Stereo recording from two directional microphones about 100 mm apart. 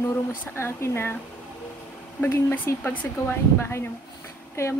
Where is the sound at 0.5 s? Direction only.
25° left (ahead or behind).